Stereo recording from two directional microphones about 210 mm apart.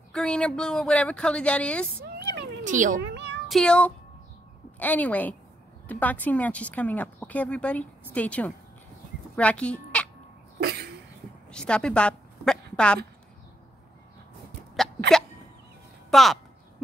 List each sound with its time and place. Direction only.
0.1 s speech: 5° left (ahead or behind)
2.0 s cat: 40° right (ahead or behind)
3.4 s speech: centre (ahead or behind)
10.6 s cough: 50° right (ahead or behind)
11.5 s a woman's voice: 5° left (ahead or behind)
14.8 s a sound: centre (ahead or behind)
16.1 s speech: centre (ahead or behind)